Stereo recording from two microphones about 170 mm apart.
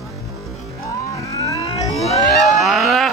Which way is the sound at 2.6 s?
Centre (ahead or behind).